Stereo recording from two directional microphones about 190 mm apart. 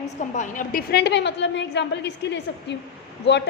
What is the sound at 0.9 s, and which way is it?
A woman's voice, 65° left (ahead or behind).